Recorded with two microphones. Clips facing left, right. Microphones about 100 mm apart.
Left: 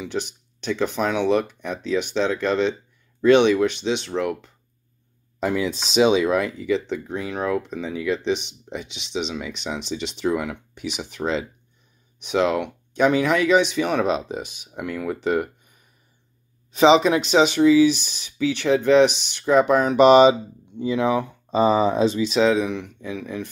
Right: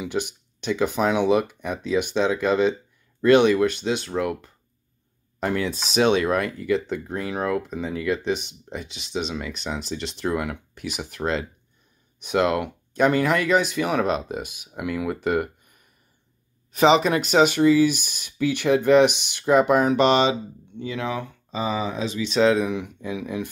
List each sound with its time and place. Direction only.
0.0 s speech: 10° right (ahead or behind)
20.0 s speech: 10° left (ahead or behind)
21.5 s speech: 35° left (ahead or behind)
22.3 s speech: centre (ahead or behind)